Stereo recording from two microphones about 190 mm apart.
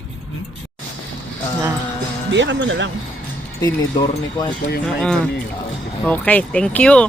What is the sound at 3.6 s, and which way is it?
Speech, 20° left (ahead or behind).